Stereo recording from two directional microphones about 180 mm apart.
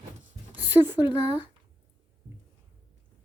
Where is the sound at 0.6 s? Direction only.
10° right (ahead or behind).